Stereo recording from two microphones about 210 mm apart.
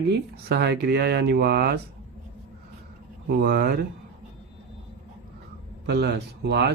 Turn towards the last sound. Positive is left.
turn(degrees=-50)  # may be behind; listen again after turning